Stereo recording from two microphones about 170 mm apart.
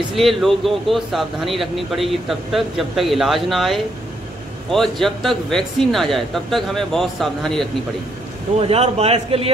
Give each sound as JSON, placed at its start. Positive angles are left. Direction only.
{"t": 0.1, "sound": "speech", "side_deg": 0}
{"t": 8.5, "sound": "a man's voice", "side_deg": -35}